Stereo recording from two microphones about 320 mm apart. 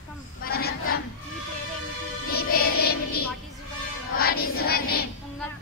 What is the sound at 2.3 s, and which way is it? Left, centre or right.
Music, left.